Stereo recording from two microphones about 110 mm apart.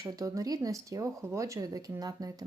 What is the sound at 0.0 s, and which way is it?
Speech, 30° right (ahead or behind).